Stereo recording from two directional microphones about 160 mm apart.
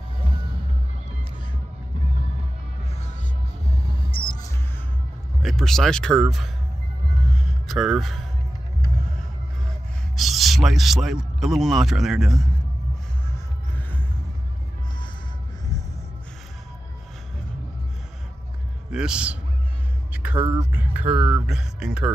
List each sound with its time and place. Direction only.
4.0 s music: 30° left (ahead or behind)
5.4 s speech: centre (ahead or behind)
7.3 s music: centre (ahead or behind)
10.1 s speech: centre (ahead or behind)
13.3 s music: 10° left (ahead or behind)
18.9 s a man's voice: 5° right (ahead or behind)